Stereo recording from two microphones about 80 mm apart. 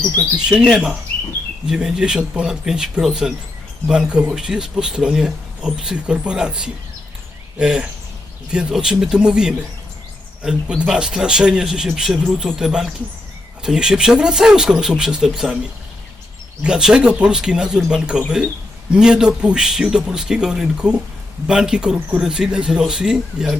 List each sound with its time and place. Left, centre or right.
0.4 s speech: centre
16.6 s speech: centre